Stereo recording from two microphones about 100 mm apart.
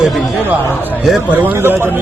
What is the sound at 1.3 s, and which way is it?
Speech, 20° right (ahead or behind).